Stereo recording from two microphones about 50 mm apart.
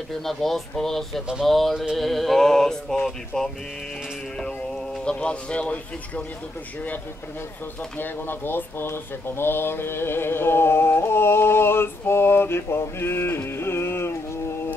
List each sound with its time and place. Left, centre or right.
0.1 s speech: centre
2.0 s mantra: centre
5.0 s speech: left
8.0 s speech: left